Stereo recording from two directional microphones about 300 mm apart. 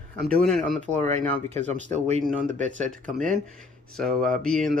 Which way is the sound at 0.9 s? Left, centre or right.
Right.